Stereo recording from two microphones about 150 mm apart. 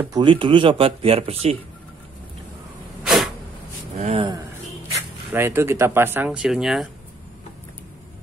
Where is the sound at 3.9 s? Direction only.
40° right (ahead or behind).